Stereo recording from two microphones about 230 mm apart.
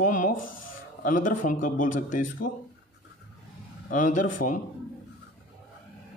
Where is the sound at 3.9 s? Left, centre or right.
Left.